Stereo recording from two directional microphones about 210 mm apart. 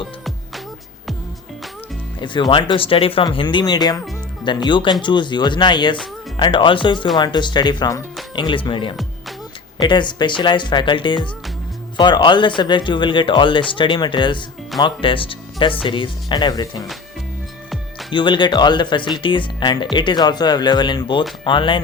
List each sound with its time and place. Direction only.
2.2 s speech: 20° left (ahead or behind)
18.1 s speech: 20° left (ahead or behind)